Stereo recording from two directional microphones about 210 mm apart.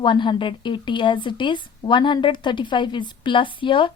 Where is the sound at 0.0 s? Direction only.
20° left (ahead or behind).